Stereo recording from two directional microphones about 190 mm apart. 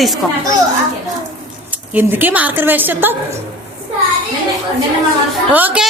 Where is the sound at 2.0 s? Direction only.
10° right (ahead or behind).